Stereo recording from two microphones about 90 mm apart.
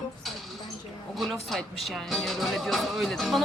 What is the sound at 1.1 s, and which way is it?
Speech, centre (ahead or behind).